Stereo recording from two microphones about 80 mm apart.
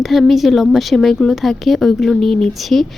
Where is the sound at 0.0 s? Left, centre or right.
Centre.